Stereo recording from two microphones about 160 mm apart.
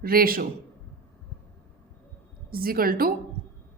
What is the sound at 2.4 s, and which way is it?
Speech, 65° right (ahead or behind).